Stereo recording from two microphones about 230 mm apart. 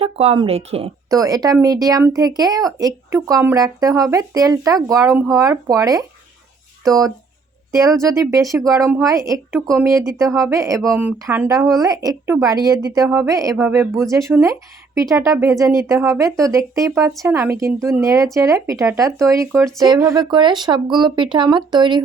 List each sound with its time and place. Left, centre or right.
0.0 s a woman's voice: right
10.8 s a woman's voice: centre